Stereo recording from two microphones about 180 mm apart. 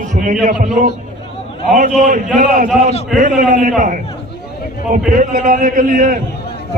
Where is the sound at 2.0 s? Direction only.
45° right (ahead or behind).